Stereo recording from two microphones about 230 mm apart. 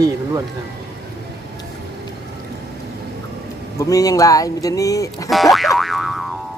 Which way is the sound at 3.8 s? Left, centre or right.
Centre.